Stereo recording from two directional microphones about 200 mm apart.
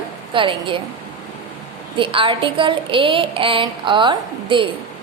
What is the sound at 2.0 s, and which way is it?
A woman's voice, 25° right (ahead or behind).